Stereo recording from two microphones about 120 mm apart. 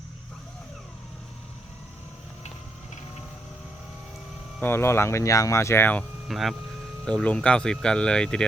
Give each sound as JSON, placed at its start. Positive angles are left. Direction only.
{"t": 4.6, "sound": "speech", "side_deg": 20}
{"t": 6.2, "sound": "speech", "side_deg": 0}